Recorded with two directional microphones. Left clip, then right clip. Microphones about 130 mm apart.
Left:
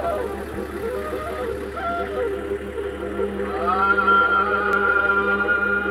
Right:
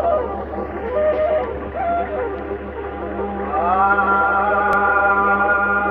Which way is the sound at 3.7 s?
25° right (ahead or behind).